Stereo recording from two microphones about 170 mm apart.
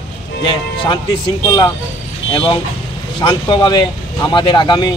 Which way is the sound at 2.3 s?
30° left (ahead or behind).